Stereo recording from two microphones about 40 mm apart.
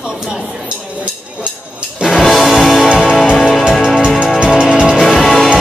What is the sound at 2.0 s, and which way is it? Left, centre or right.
Music, centre.